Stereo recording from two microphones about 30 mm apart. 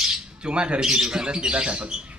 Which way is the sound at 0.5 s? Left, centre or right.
Right.